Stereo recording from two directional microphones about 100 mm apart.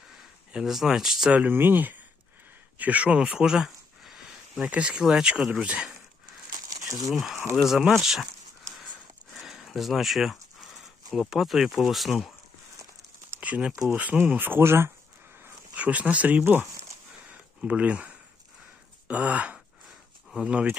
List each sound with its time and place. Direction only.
0.1 s speech: 5° right (ahead or behind)
6.7 s crumpling: 35° right (ahead or behind)
7.1 s speech: centre (ahead or behind)
9.3 s a sound: centre (ahead or behind)
11.1 s speech: 5° right (ahead or behind)
13.3 s speech: 15° right (ahead or behind)
15.7 s speech: 15° right (ahead or behind)
17.2 s a sound: 15° right (ahead or behind)
19.0 s speech: 15° right (ahead or behind)